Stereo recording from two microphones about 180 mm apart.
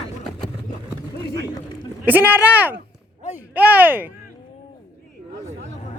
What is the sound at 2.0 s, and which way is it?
Speech, 10° right (ahead or behind).